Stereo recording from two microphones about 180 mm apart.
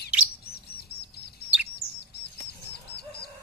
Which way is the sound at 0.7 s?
65° left (ahead or behind).